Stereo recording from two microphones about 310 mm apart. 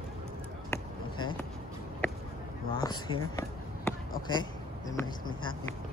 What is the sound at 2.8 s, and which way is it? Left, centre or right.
Speech, centre.